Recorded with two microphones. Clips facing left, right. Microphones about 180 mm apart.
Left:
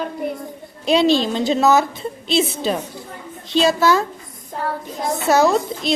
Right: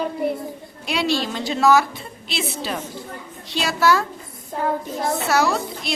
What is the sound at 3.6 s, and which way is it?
Speech, 20° left (ahead or behind).